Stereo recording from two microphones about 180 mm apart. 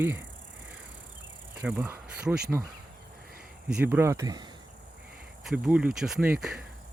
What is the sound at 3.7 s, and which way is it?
Speech, 10° right (ahead or behind).